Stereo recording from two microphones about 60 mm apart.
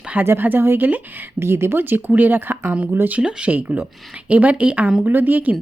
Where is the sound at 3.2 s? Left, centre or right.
Centre.